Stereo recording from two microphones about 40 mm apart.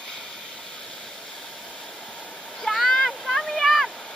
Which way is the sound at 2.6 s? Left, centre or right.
Centre.